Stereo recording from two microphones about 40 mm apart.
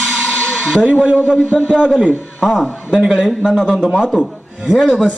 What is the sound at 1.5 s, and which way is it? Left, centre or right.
Speech, right.